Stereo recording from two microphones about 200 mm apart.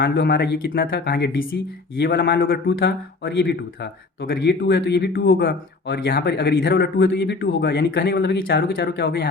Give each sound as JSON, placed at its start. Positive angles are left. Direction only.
{"t": 0.0, "sound": "a man's voice", "side_deg": 55}